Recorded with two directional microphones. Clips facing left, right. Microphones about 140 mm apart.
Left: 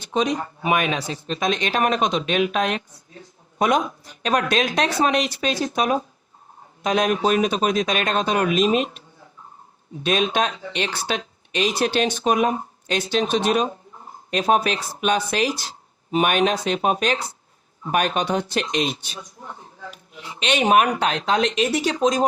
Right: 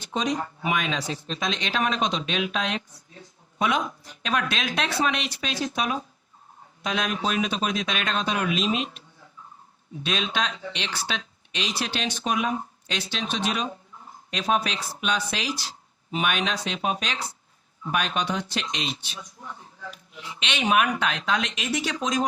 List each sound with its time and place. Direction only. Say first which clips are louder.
0.1 s speech: left 4 dB; 65° left (ahead or behind); by 22.3 s 35° left (ahead or behind)